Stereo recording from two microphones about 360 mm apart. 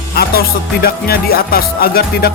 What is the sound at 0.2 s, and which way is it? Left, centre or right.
Music, left.